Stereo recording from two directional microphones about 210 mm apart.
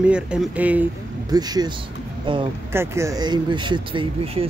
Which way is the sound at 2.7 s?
15° right (ahead or behind).